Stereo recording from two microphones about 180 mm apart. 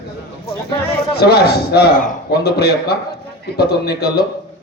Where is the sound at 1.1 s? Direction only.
65° left (ahead or behind).